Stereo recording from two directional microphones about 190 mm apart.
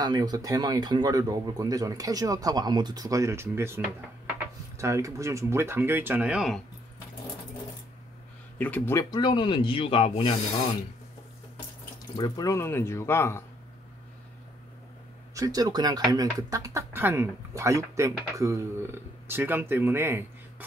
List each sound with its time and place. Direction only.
0.0 s speech: 20° right (ahead or behind); by 6.6 s 5° right (ahead or behind)
8.5 s speech: 10° left (ahead or behind); by 10.3 s 30° left (ahead or behind)
12.2 s speech: 20° left (ahead or behind)
15.3 s speech: 20° right (ahead or behind)